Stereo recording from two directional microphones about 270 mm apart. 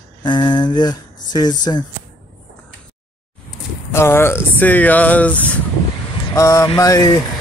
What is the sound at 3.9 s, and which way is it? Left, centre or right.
Speech, centre.